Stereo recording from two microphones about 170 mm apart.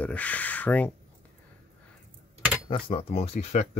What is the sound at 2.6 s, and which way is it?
Speech, 30° left (ahead or behind).